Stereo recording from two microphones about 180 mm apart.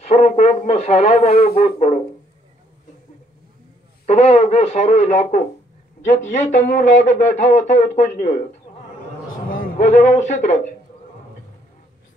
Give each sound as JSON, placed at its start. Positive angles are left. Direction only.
{"t": 0.0, "sound": "speech", "side_deg": 40}
{"t": 4.0, "sound": "speech", "side_deg": 35}
{"t": 9.5, "sound": "a man's voice", "side_deg": 45}